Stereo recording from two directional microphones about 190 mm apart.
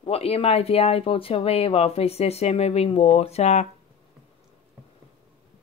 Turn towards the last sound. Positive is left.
turn(degrees=35)  # may be behind; listen again after turning